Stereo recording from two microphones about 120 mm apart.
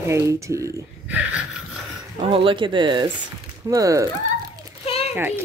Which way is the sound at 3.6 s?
25° right (ahead or behind).